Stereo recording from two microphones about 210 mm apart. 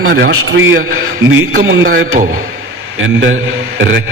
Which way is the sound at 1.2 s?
70° right (ahead or behind).